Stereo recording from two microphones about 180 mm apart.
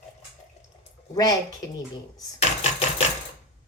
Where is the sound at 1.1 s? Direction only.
20° left (ahead or behind).